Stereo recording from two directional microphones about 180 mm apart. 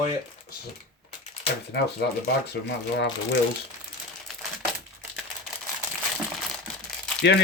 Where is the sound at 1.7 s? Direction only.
65° left (ahead or behind).